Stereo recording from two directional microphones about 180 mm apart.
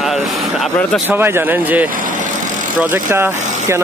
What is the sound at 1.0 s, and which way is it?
Speech, 10° right (ahead or behind).